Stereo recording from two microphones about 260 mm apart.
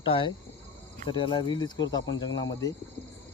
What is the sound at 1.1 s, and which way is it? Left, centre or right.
Cricket, centre.